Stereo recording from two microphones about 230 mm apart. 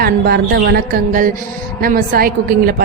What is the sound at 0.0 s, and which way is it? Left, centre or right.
Speech, right.